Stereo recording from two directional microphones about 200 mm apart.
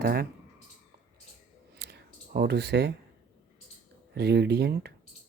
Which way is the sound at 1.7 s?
55° right (ahead or behind).